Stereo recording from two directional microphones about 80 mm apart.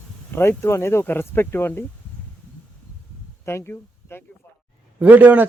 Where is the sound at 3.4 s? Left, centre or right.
Left.